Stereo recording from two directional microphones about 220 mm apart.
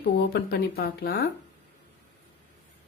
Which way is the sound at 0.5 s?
45° left (ahead or behind).